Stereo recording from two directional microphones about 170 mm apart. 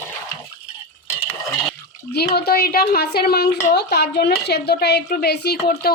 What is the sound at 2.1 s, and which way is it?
A woman's voice, 70° left (ahead or behind).